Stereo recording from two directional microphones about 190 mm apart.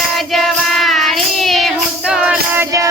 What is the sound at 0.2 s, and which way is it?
Child singing, centre (ahead or behind).